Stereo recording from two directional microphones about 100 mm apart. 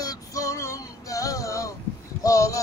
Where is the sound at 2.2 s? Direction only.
35° left (ahead or behind).